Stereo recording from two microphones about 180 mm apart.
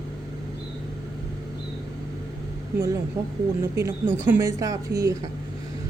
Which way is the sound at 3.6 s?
15° right (ahead or behind).